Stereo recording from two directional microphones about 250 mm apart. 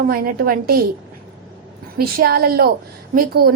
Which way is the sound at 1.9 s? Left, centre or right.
Right.